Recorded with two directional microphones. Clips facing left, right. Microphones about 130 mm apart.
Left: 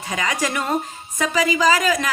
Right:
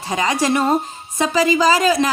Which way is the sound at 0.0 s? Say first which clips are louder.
Right 5 dB; 30° right (ahead or behind).